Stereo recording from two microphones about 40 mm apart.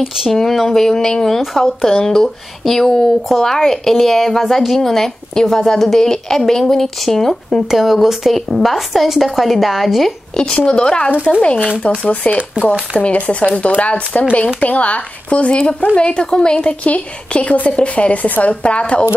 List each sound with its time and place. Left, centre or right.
0.3 s a woman's voice: centre
1.4 s speech: centre
1.9 s a woman's voice: centre
7.7 s speech: centre
10.3 s a woman's voice: centre
12.9 s a woman's voice: left
18.5 s a woman's voice: left